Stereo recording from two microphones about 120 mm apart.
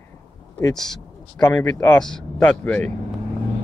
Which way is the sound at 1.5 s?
15° left (ahead or behind).